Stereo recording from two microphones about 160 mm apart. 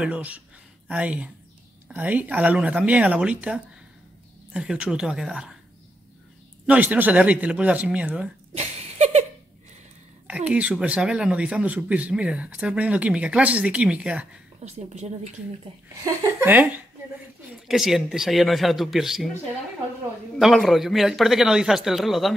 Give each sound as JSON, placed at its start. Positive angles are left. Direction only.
{"t": 0.0, "sound": "a man's voice", "side_deg": -10}
{"t": 6.6, "sound": "speech", "side_deg": -10}
{"t": 8.5, "sound": "a sound", "side_deg": -45}
{"t": 10.2, "sound": "speech", "side_deg": -5}
{"t": 14.6, "sound": "a woman's voice", "side_deg": -45}
{"t": 16.0, "sound": "speech", "side_deg": -20}
{"t": 17.6, "sound": "a man's voice", "side_deg": 0}
{"t": 20.3, "sound": "a man's voice", "side_deg": 0}